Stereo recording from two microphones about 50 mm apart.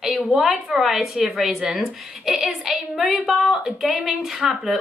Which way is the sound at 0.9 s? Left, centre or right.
Centre.